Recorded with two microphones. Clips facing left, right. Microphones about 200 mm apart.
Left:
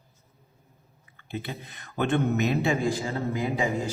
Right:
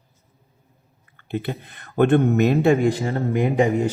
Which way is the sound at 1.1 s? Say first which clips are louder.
Right 8 dB; 55° right (ahead or behind).